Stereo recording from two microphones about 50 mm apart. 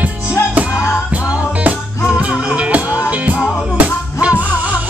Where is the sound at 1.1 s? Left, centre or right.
Right.